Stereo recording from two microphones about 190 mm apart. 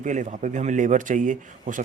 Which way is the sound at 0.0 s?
40° right (ahead or behind).